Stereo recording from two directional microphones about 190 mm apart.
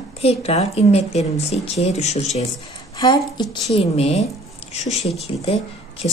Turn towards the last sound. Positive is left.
turn(degrees=30)  # may be behind; listen again after turning